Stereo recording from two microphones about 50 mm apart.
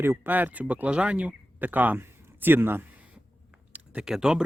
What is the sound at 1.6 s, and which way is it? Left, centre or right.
Speech, right.